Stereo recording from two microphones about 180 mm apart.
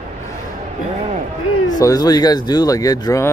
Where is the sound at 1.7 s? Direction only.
20° left (ahead or behind).